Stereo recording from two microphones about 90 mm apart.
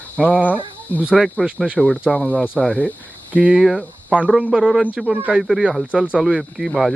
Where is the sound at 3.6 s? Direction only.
Centre (ahead or behind).